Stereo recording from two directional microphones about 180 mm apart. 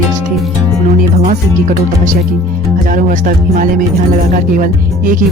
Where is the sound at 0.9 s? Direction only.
40° right (ahead or behind).